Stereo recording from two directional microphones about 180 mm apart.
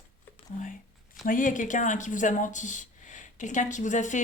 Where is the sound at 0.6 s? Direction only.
45° left (ahead or behind).